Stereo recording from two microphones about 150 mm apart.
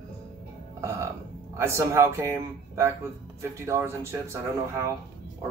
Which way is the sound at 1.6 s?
15° right (ahead or behind).